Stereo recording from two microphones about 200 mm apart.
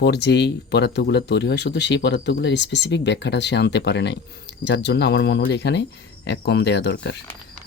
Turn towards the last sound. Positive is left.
turn(degrees=55)  # may be behind; listen again after turning